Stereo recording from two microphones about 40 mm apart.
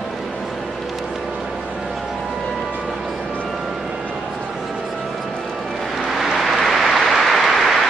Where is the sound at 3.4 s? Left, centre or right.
Centre.